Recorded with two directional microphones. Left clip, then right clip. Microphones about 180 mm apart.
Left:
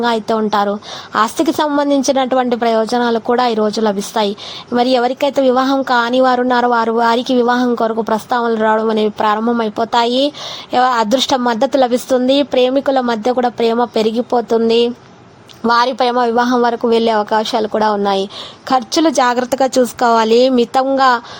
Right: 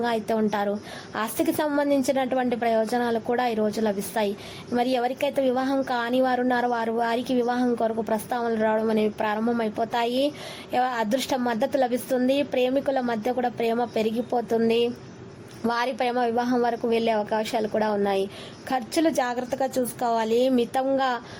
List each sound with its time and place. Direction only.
0.0 s a woman's voice: 20° left (ahead or behind)
15.6 s a woman's voice: 20° left (ahead or behind)